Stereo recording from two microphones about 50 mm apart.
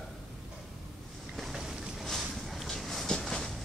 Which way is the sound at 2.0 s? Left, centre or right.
Centre.